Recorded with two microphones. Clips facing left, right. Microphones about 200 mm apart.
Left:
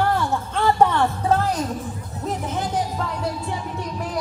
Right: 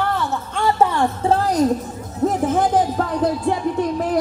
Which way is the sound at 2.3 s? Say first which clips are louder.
Right 8 dB; 50° right (ahead or behind).